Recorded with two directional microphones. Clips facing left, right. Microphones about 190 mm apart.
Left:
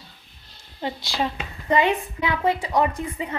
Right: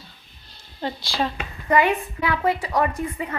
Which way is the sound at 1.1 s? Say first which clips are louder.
Right 1 dB; 20° left (ahead or behind).